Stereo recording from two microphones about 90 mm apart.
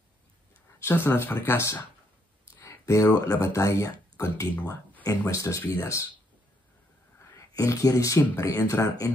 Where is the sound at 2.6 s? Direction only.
35° left (ahead or behind).